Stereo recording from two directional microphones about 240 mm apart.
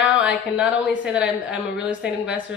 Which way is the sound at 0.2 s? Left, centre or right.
Centre.